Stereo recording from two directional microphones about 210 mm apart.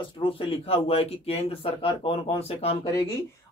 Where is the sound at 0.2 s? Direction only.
25° left (ahead or behind).